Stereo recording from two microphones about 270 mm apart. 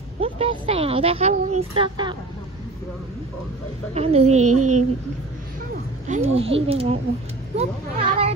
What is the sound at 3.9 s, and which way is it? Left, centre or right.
Speech, right.